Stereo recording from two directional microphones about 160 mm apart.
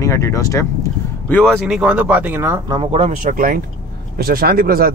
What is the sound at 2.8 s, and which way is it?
Speech, 40° right (ahead or behind).